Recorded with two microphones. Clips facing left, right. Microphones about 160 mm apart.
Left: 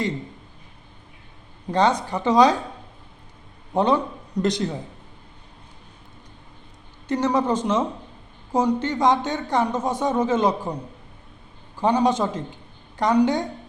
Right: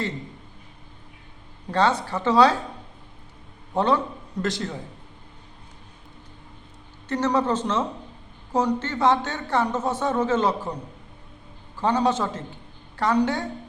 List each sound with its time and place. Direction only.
1.7 s speech: 15° left (ahead or behind)
3.8 s a man's voice: 15° left (ahead or behind)
7.1 s speech: 15° left (ahead or behind)
11.8 s speech: 15° left (ahead or behind)